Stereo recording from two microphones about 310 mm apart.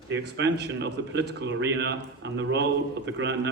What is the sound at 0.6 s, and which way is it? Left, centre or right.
A man's voice, right.